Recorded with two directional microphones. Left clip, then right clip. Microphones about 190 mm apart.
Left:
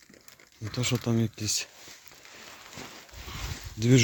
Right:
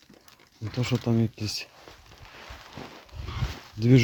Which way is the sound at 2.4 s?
25° right (ahead or behind).